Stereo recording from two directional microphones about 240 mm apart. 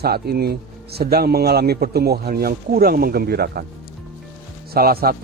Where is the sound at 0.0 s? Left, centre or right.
Right.